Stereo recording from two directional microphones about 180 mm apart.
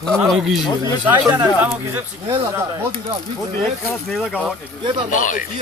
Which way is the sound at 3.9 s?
Centre (ahead or behind).